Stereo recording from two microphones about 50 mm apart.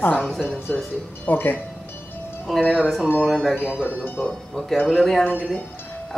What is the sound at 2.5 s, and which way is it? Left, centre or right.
Speech, centre.